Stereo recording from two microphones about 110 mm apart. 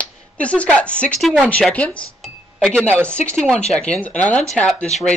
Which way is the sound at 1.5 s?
10° left (ahead or behind).